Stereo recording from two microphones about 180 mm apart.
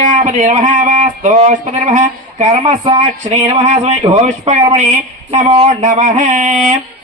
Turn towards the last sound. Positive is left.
turn(degrees=-45)  # may be behind; listen again after turning